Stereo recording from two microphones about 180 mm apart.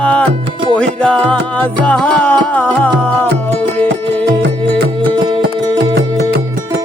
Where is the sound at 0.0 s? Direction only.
10° left (ahead or behind).